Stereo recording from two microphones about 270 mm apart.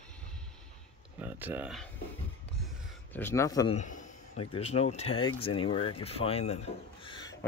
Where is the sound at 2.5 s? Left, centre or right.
Centre.